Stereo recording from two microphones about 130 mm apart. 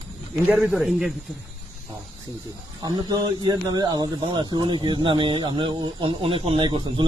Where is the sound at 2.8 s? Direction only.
30° right (ahead or behind).